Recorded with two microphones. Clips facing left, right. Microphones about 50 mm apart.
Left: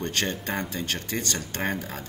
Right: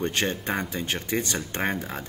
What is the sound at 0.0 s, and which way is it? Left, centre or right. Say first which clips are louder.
Speech: right 2 dB; centre.